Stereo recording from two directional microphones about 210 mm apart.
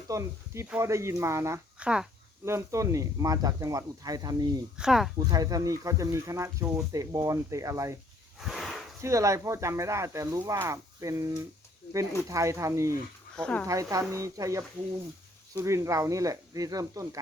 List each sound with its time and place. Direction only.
0.1 s speech: 15° right (ahead or behind)
4.8 s speech: centre (ahead or behind)
5.3 s speech: 15° right (ahead or behind)
8.4 s a sound: centre (ahead or behind)
9.0 s speech: 15° right (ahead or behind)
13.3 s speech: 5° left (ahead or behind)
13.7 s speech: 15° right (ahead or behind)